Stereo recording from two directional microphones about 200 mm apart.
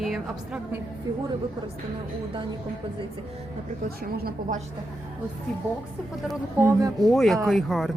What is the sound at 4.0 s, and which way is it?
Speech, 50° right (ahead or behind).